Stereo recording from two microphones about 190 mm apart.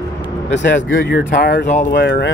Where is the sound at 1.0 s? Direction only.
55° left (ahead or behind).